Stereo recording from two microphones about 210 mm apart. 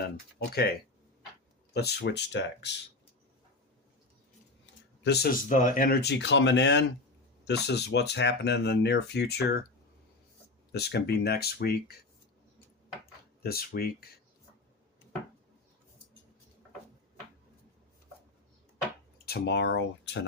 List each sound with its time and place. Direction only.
0.3 s speech: 50° left (ahead or behind)
1.7 s speech: 50° left (ahead or behind)
5.0 s speech: 50° left (ahead or behind)
5.5 s speech: 40° left (ahead or behind)
10.7 s speech: 50° left (ahead or behind)
13.4 s speech: 45° left (ahead or behind)
19.2 s speech: 50° left (ahead or behind)